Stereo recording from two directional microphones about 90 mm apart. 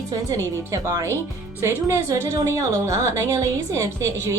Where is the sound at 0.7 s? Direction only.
35° right (ahead or behind).